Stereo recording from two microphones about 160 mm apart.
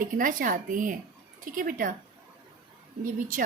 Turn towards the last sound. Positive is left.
turn(degrees=-60)  # may be behind; listen again after turning